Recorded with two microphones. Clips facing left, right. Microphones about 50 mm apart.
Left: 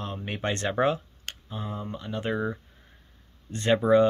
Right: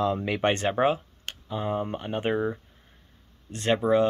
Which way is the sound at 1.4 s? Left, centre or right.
Right.